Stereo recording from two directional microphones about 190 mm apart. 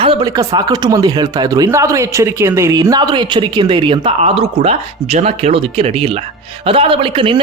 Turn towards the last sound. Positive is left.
turn(degrees=-25)  # may be behind; listen again after turning